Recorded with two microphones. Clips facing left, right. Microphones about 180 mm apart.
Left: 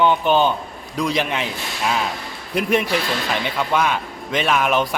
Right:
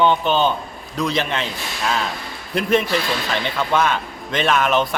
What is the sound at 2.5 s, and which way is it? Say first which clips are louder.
Speech: right 1 dB; 10° left (ahead or behind).